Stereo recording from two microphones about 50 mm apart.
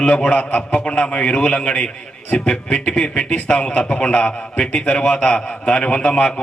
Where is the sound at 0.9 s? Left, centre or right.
Centre.